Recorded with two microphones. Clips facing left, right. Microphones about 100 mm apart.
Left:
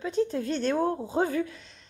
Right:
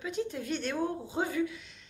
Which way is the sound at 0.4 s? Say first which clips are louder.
Left 5 dB; 10° right (ahead or behind).